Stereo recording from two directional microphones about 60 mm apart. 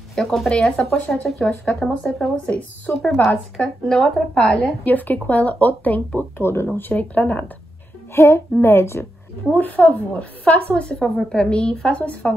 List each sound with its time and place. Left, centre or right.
0.1 s a woman's voice: centre; by 1.2 s left
1.7 s speech: centre
3.5 s a woman's voice: centre
4.8 s speech: left
6.3 s a woman's voice: left
6.9 s speech: left
8.1 s a woman's voice: left
9.5 s a woman's voice: left